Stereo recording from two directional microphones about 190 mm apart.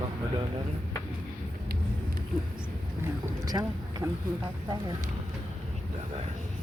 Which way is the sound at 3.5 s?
20° right (ahead or behind).